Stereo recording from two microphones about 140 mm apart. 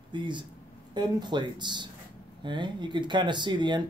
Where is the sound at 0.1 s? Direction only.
35° right (ahead or behind).